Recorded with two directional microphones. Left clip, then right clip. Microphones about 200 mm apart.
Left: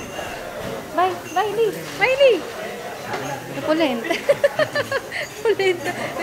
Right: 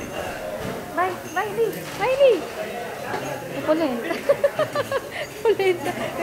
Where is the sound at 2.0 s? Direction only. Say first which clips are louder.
Left 2 dB; 5° left (ahead or behind).